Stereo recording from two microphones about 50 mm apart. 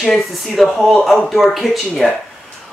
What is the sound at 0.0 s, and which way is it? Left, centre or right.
Speech, centre.